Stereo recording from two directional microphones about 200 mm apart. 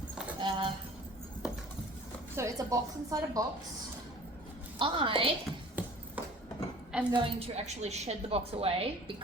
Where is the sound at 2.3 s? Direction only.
15° right (ahead or behind).